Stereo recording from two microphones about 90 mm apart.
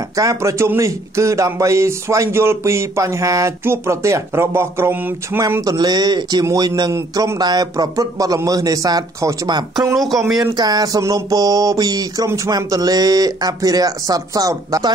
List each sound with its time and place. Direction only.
0.1 s a man's voice: 40° right (ahead or behind)
5.7 s speech: 50° right (ahead or behind)
6.9 s a man's voice: 35° right (ahead or behind)
7.3 s speech: 50° right (ahead or behind)